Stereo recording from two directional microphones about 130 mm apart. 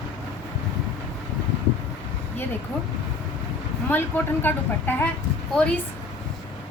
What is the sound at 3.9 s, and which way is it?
Speech, 15° left (ahead or behind).